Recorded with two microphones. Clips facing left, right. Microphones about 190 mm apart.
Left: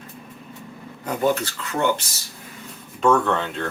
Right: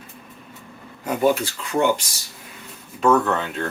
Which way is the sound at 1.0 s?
10° right (ahead or behind).